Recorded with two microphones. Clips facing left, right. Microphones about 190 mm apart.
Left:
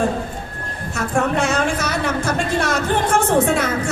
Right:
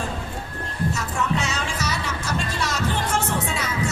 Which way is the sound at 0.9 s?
55° left (ahead or behind).